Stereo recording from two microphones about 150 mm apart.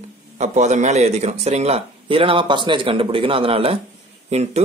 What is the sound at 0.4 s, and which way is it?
Speech, 50° right (ahead or behind).